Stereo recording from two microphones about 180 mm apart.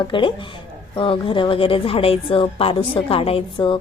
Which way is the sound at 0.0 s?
25° left (ahead or behind).